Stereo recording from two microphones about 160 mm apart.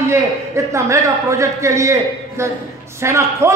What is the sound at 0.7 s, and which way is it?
A man's voice, 20° right (ahead or behind).